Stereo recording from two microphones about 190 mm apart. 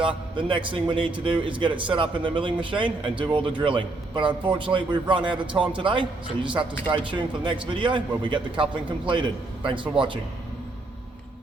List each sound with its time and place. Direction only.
0.0 s speech: 25° right (ahead or behind)